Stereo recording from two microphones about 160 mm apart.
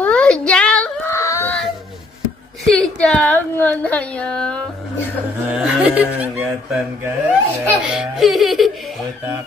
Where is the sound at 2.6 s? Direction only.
5° left (ahead or behind).